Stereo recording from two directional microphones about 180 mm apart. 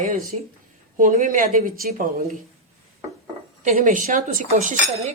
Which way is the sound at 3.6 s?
45° right (ahead or behind).